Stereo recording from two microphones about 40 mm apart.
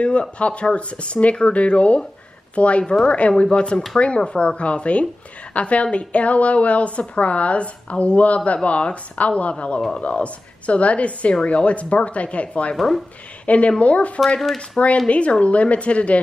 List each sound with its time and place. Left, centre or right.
0.0 s a woman's voice: left
12.7 s speech: centre
13.5 s a woman's voice: left
14.4 s speech: centre
15.0 s a woman's voice: left